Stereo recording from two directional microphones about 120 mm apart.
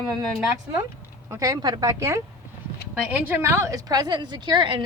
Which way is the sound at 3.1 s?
15° right (ahead or behind).